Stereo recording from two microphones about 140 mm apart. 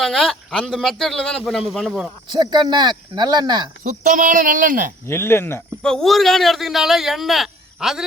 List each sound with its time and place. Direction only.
0.0 s a man's voice: centre (ahead or behind)
2.3 s speech: 30° right (ahead or behind)
3.8 s speech: 65° right (ahead or behind)
5.0 s speech: 15° left (ahead or behind)
5.8 s a man's voice: 5° left (ahead or behind)